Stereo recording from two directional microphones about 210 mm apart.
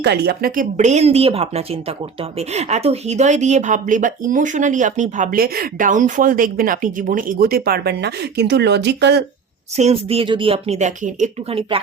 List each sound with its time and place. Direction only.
0.0 s speech: 50° right (ahead or behind)
9.7 s speech: 30° right (ahead or behind)